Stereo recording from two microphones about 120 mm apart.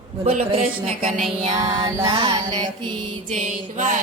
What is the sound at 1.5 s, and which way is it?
Music, 30° right (ahead or behind).